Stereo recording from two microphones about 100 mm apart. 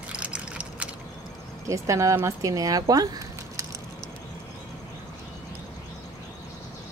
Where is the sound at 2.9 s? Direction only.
40° right (ahead or behind).